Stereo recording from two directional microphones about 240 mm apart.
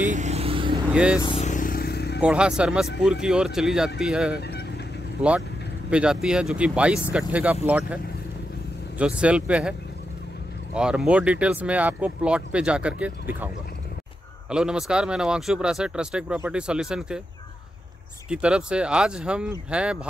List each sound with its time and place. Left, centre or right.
0.0 s vehicle: right
0.9 s speech: centre
1.2 s vehicle: left
2.2 s speech: centre
4.4 s vehicle: left
5.2 s speech: centre
14.5 s speech: centre
18.3 s speech: centre